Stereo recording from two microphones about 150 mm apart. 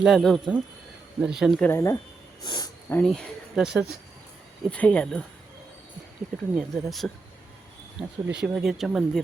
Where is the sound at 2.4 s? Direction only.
30° left (ahead or behind).